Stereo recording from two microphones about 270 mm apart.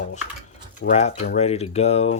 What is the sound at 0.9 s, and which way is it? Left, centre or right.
Speech, left.